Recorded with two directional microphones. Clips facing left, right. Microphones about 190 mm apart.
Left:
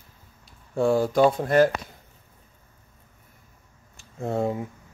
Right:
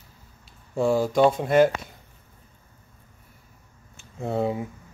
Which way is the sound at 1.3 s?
20° right (ahead or behind).